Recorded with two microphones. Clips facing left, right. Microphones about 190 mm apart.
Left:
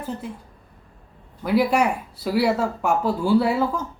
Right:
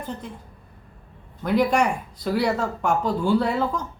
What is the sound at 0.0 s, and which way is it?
Speech, 5° left (ahead or behind).